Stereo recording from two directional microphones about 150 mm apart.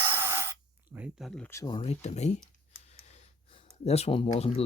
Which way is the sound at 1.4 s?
20° left (ahead or behind).